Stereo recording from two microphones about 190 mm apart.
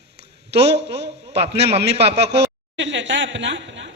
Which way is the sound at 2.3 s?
65° right (ahead or behind).